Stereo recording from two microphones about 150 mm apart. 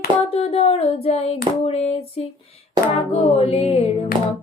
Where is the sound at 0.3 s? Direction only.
45° left (ahead or behind).